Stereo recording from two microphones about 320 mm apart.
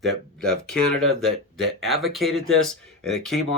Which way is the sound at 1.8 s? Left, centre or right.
Centre.